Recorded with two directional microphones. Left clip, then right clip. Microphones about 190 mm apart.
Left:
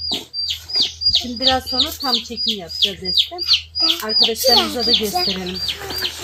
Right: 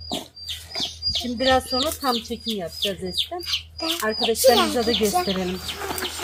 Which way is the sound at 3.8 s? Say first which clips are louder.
Left 8 dB; 20° right (ahead or behind).